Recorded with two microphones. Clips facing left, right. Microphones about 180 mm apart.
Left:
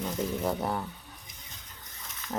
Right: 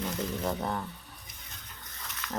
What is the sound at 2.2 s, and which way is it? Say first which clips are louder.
Ratchet: left 2 dB; 75° right (ahead or behind).